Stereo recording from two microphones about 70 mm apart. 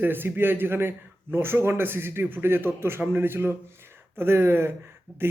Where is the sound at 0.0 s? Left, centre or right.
Right.